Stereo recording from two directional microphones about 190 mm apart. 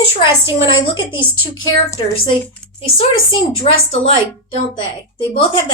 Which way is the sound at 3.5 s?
30° left (ahead or behind).